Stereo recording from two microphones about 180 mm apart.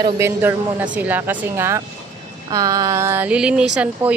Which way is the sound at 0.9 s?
10° right (ahead or behind).